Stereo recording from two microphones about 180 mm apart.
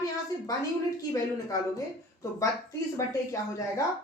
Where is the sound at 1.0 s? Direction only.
20° left (ahead or behind).